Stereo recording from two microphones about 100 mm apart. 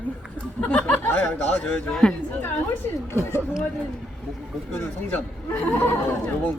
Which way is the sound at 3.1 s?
25° left (ahead or behind).